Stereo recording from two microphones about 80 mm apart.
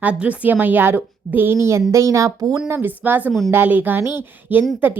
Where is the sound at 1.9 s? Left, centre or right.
Right.